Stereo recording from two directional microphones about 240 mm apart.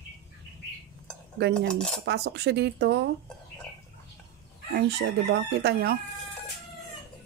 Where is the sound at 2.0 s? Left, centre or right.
Right.